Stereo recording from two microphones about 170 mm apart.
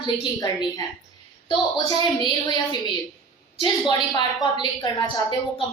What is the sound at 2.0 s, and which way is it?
Speech, 25° left (ahead or behind).